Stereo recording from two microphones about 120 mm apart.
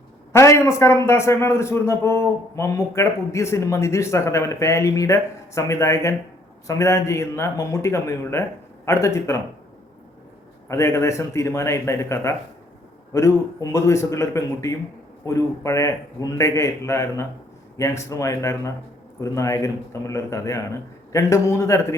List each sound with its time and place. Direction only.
0.3 s a man's voice: 25° left (ahead or behind)
10.7 s a man's voice: 25° left (ahead or behind)